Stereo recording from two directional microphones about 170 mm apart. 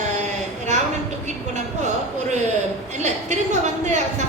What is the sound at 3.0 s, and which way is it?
Speech, 45° right (ahead or behind).